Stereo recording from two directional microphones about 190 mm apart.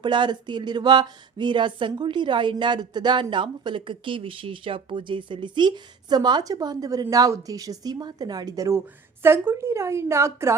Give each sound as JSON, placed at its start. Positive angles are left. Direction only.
{"t": 0.0, "sound": "a woman's voice", "side_deg": -25}